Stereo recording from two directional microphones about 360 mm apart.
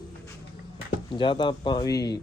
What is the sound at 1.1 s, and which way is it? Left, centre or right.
Speech, centre.